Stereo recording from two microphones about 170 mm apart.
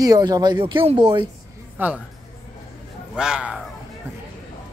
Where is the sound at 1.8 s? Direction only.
10° right (ahead or behind).